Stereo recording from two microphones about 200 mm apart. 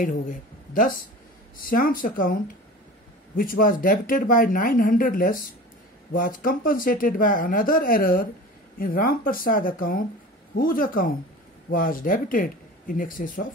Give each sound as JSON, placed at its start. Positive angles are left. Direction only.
{"t": 0.0, "sound": "speech", "side_deg": 40}
{"t": 3.3, "sound": "speech", "side_deg": 45}